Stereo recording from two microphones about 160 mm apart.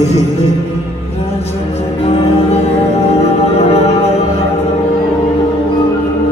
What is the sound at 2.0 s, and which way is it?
Music, 40° left (ahead or behind).